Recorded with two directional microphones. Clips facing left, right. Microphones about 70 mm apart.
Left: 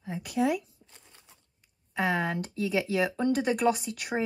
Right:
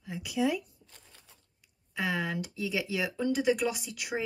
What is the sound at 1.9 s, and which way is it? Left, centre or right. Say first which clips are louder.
Speech: left 4 dB; left.